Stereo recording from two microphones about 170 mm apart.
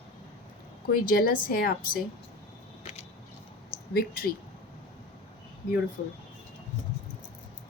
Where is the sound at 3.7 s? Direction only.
60° left (ahead or behind).